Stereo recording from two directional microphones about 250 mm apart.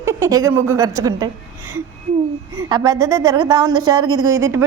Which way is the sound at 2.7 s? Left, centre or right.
Centre.